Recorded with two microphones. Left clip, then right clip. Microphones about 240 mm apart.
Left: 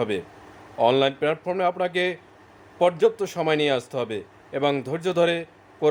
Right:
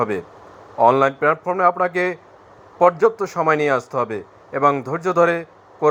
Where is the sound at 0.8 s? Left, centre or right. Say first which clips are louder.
Right 5 dB; centre.